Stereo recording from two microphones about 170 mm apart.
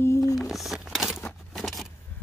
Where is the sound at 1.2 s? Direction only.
5° left (ahead or behind).